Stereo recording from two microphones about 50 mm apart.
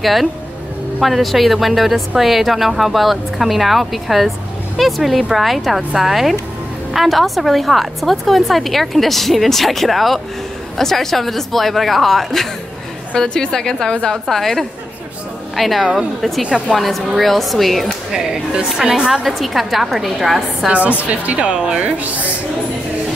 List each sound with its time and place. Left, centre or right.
0.0 s a woman's voice: centre
16.4 s speech: centre
16.7 s a woman's voice: centre
18.1 s a woman's voice: centre
19.2 s a woman's voice: centre
20.6 s speech: right